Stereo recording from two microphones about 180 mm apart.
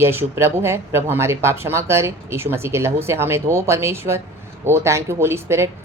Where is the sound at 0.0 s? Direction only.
15° right (ahead or behind).